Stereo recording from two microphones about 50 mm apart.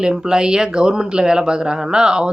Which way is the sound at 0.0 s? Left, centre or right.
Centre.